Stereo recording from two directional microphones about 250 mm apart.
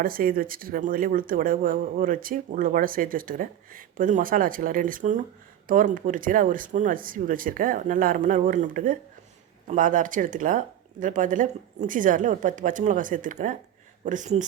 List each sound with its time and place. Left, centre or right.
0.0 s speech: right